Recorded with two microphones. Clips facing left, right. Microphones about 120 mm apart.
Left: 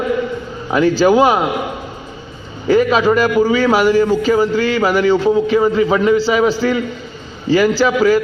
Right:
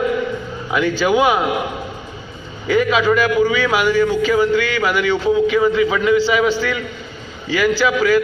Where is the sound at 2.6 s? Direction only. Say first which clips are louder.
Left 3 dB; 40° left (ahead or behind).